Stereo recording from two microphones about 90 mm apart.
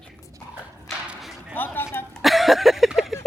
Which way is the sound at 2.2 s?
Centre (ahead or behind).